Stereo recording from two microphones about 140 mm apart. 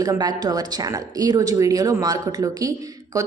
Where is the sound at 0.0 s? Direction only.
30° right (ahead or behind).